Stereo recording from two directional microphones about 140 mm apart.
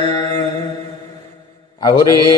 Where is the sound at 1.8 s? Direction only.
25° left (ahead or behind).